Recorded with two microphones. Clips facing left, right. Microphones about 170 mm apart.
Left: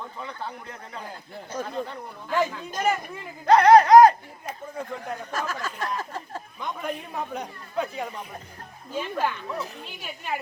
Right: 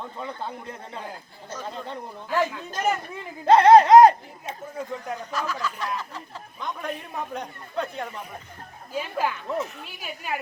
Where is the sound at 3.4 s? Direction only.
25° right (ahead or behind).